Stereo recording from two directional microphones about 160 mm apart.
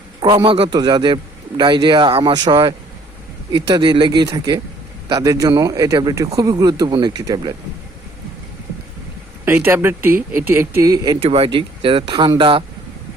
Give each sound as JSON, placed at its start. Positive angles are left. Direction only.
{"t": 0.3, "sound": "speech", "side_deg": -35}
{"t": 9.4, "sound": "speech", "side_deg": -15}
{"t": 11.2, "sound": "speech", "side_deg": -40}